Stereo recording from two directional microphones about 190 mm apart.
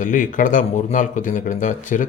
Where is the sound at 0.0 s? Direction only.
45° left (ahead or behind).